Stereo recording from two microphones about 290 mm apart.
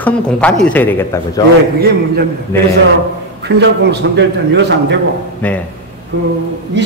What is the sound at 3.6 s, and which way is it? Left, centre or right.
A man's voice, right.